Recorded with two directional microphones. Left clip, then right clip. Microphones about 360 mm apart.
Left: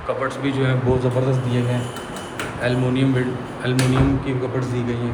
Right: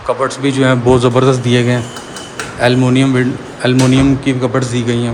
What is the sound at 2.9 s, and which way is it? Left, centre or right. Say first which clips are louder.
Speech: right 8 dB; centre.